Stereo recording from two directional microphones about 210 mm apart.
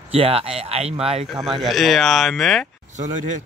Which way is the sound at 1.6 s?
Centre (ahead or behind).